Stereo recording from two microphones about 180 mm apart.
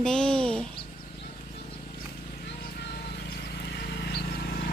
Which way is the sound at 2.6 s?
65° left (ahead or behind).